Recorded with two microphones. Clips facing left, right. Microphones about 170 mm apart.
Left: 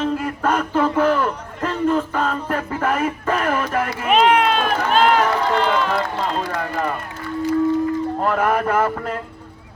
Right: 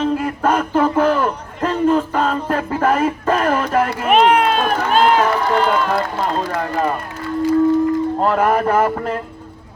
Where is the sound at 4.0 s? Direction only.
45° right (ahead or behind).